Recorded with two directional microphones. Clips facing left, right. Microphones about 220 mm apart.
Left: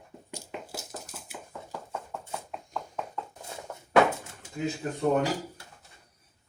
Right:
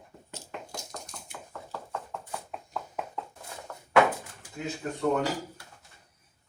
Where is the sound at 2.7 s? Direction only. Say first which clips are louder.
Even; 10° right (ahead or behind).